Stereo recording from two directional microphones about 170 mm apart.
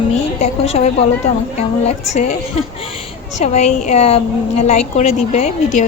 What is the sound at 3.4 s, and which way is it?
A woman's voice, 45° left (ahead or behind).